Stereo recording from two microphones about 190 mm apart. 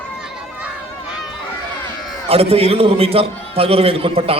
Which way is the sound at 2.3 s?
30° right (ahead or behind).